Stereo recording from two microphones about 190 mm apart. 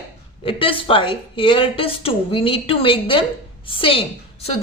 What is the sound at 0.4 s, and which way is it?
A woman's voice, 30° left (ahead or behind).